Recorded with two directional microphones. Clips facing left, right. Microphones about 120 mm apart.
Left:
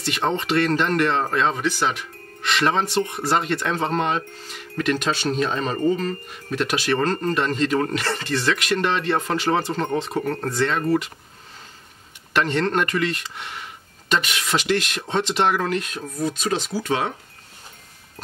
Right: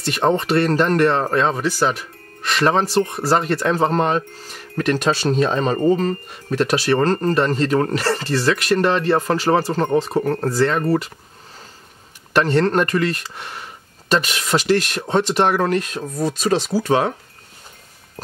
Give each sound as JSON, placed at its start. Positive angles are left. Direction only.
{"t": 0.0, "sound": "speech", "side_deg": -40}
{"t": 12.3, "sound": "speech", "side_deg": -40}